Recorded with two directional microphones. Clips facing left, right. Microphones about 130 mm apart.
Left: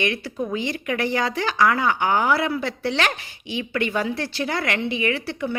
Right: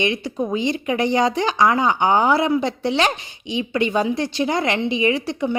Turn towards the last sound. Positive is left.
turn(degrees=-20)  # may be behind; listen again after turning